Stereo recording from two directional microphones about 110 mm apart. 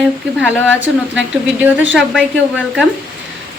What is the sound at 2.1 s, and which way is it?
Speech, 5° right (ahead or behind).